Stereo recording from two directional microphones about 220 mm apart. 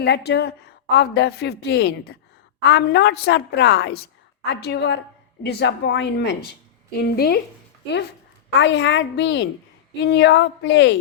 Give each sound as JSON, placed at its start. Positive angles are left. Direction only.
{"t": 0.0, "sound": "a woman's voice", "side_deg": 50}
{"t": 8.5, "sound": "a woman's voice", "side_deg": 50}